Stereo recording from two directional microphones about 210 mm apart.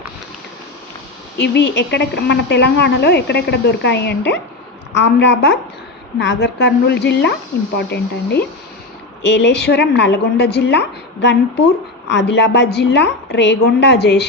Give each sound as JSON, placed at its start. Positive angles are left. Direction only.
{"t": 1.4, "sound": "a woman's voice", "side_deg": 55}